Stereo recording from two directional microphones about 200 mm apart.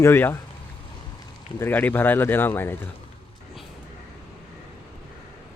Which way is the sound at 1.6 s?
10° left (ahead or behind).